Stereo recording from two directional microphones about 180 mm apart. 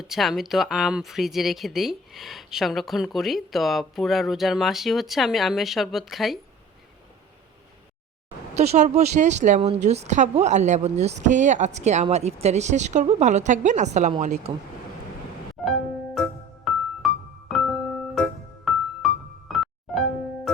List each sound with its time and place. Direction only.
0.0 s speech: centre (ahead or behind)
8.5 s a woman's voice: 35° right (ahead or behind)
16.2 s music: centre (ahead or behind)